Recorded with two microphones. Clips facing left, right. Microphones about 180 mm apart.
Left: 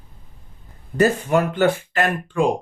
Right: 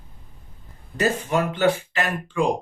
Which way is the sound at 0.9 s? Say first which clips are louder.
Left 5 dB; 50° left (ahead or behind).